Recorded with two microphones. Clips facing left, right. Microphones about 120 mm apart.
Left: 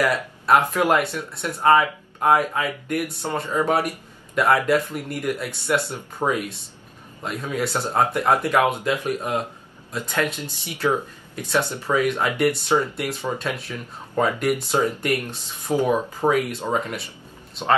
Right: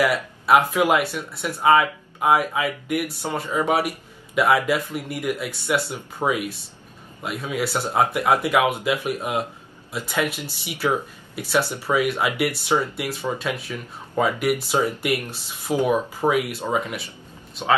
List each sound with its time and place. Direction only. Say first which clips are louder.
0.0 s speech: right 1 dB; 5° right (ahead or behind)